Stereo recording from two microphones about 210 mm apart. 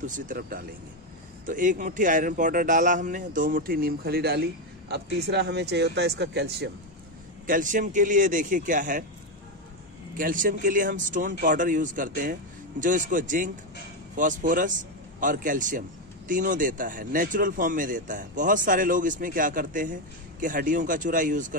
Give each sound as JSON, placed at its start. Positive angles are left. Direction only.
{"t": 0.0, "sound": "a man's voice", "side_deg": -40}
{"t": 7.4, "sound": "speech", "side_deg": -40}
{"t": 10.1, "sound": "speech", "side_deg": -40}